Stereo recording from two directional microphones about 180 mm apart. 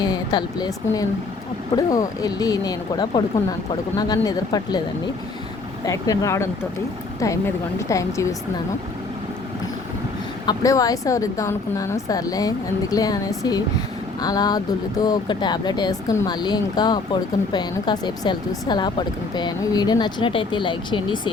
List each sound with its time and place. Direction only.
0.0 s speech: 25° left (ahead or behind)
5.8 s a woman's voice: 15° left (ahead or behind)
10.4 s speech: 20° left (ahead or behind)